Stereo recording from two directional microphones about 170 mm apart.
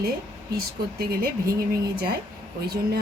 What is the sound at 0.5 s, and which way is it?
Speech, 60° right (ahead or behind).